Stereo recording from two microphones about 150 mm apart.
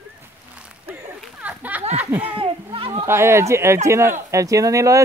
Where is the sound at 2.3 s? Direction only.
40° right (ahead or behind).